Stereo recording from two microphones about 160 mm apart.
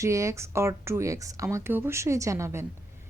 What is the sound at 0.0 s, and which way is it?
Speech, 20° right (ahead or behind).